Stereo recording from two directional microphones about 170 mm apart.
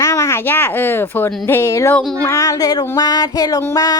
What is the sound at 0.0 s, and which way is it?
A woman's voice, 15° left (ahead or behind).